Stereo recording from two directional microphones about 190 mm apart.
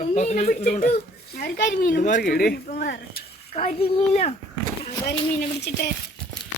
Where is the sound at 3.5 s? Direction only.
35° left (ahead or behind).